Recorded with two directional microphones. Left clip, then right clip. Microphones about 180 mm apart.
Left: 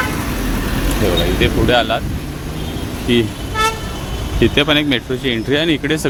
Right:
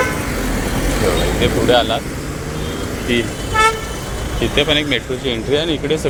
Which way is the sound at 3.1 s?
40° left (ahead or behind).